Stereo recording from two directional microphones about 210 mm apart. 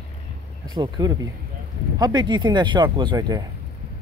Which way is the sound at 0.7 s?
20° right (ahead or behind).